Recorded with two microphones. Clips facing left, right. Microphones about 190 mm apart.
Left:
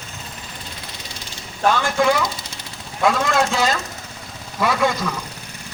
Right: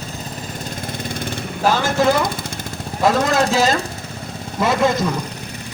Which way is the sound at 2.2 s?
55° right (ahead or behind).